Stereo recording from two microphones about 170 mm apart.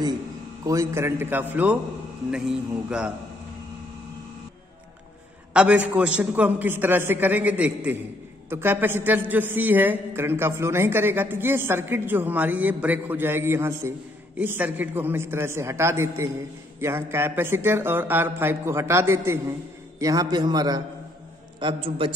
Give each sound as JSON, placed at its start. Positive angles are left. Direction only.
{"t": 0.7, "sound": "a man's voice", "side_deg": -15}
{"t": 5.5, "sound": "a man's voice", "side_deg": -5}